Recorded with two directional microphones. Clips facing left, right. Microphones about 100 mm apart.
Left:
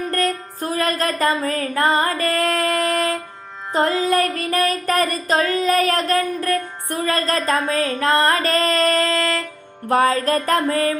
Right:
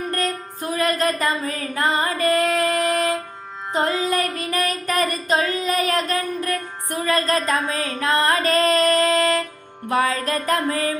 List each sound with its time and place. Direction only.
0.1 s music: 45° left (ahead or behind)
9.0 s a sound: 15° right (ahead or behind)
9.9 s music: 40° left (ahead or behind)